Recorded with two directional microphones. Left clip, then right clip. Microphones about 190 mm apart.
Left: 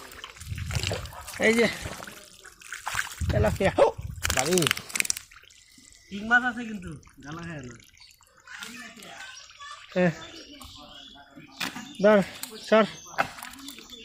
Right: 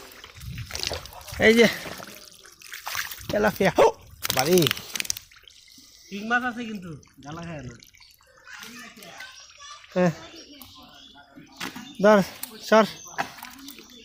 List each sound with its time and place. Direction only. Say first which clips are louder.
0.2 s a sound: left 1 dB; centre (ahead or behind)
1.4 s speech: right 5 dB; 40° right (ahead or behind)
2.7 s splash: even; 25° right (ahead or behind)
3.3 s speech: right 3 dB; 35° right (ahead or behind)
4.2 s speech: right 4 dB; 5° right (ahead or behind)
4.9 s a sound: left 2 dB; 20° left (ahead or behind)
6.3 s speech: left 3 dB; 35° right (ahead or behind)
7.3 s speech: right 2 dB; 55° right (ahead or behind)
9.9 s speech: right 2 dB; 20° right (ahead or behind)
11.9 s speech: right 2 dB; 25° right (ahead or behind)